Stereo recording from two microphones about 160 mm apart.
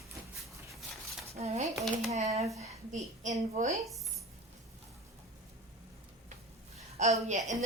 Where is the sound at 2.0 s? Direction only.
45° right (ahead or behind).